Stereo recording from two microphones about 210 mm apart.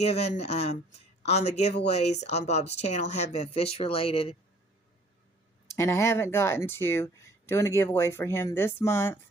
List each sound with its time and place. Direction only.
0.0 s speech: 30° left (ahead or behind)
5.6 s speech: 15° left (ahead or behind)